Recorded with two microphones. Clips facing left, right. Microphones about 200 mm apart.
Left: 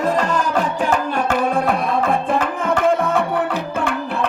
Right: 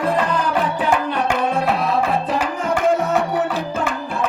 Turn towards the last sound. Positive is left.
turn(degrees=55)  # may be behind; listen again after turning